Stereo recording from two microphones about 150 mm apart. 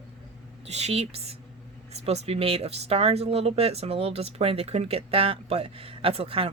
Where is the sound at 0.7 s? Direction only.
45° right (ahead or behind).